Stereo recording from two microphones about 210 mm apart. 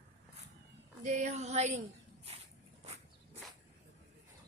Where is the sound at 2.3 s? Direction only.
30° right (ahead or behind).